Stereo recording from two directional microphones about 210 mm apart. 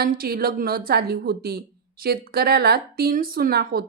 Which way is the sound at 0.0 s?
45° right (ahead or behind).